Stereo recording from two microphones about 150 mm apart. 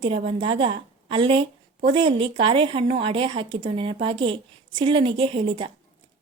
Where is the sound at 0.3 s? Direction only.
40° right (ahead or behind).